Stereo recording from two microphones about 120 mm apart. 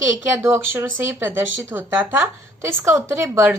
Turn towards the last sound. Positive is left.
turn(degrees=-20)  # may be behind; listen again after turning